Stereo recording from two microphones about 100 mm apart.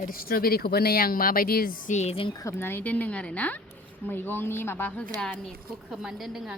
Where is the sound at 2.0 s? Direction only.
70° left (ahead or behind).